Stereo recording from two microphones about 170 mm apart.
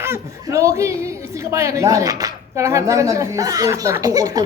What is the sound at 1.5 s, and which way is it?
Speech, 15° right (ahead or behind).